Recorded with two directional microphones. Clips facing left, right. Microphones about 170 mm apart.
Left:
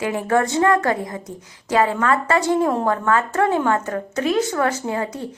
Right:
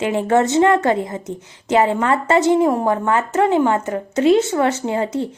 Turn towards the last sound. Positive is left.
turn(degrees=-25)  # may be behind; listen again after turning